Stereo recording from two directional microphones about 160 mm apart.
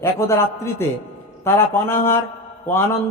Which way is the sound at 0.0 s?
15° left (ahead or behind).